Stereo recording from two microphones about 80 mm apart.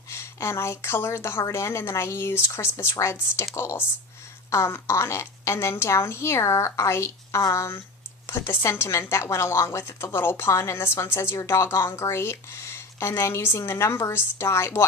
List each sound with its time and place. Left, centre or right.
0.1 s a woman's voice: left